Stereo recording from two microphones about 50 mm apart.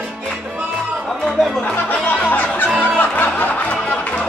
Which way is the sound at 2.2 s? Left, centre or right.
Left.